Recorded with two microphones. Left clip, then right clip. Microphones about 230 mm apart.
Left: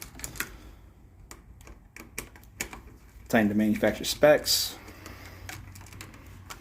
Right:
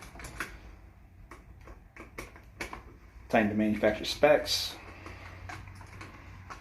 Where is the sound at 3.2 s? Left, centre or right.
Left.